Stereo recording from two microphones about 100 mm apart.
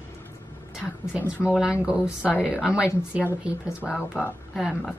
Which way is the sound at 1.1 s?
10° right (ahead or behind).